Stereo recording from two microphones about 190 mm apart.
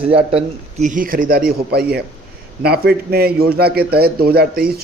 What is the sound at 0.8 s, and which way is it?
A man's voice, 45° right (ahead or behind).